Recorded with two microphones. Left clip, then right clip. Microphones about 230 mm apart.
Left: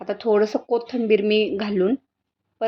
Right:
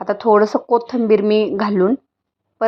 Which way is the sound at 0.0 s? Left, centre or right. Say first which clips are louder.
Right 6 dB; centre.